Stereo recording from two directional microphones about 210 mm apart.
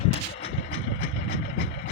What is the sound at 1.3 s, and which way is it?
Vehicle, 60° left (ahead or behind).